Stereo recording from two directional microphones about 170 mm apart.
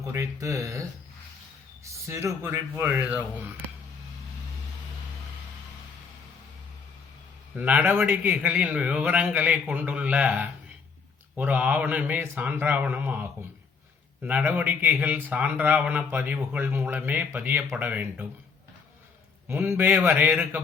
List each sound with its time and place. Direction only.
0.0 s speech: 20° right (ahead or behind)
7.5 s speech: 10° right (ahead or behind)
14.3 s speech: 10° right (ahead or behind)
19.5 s speech: 10° right (ahead or behind)